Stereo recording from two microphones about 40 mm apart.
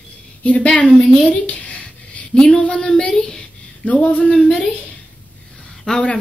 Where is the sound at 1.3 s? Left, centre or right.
Left.